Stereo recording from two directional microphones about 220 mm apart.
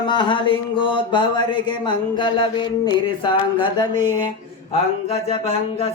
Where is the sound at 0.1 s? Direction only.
20° left (ahead or behind).